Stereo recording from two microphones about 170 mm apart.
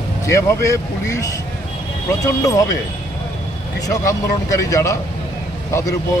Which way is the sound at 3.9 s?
20° left (ahead or behind).